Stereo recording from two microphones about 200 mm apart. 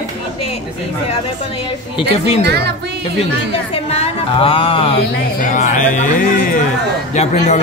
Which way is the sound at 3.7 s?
30° left (ahead or behind).